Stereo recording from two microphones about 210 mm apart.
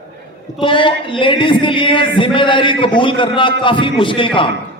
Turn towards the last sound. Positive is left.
turn(degrees=25)  # may be behind; listen again after turning